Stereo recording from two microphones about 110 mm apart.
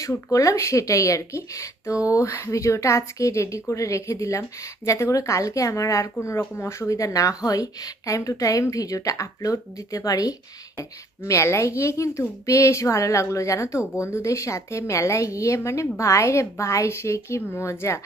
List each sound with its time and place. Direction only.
0.0 s speech: 30° left (ahead or behind)